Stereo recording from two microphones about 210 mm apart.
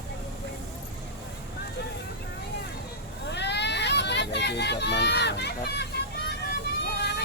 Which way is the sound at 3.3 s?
55° left (ahead or behind).